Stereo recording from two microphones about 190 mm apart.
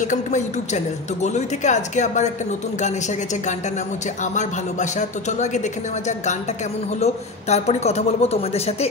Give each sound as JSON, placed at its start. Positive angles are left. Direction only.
{"t": 0.0, "sound": "a woman's voice", "side_deg": 40}
{"t": 4.2, "sound": "a woman's voice", "side_deg": 40}
{"t": 7.0, "sound": "a woman's voice", "side_deg": 35}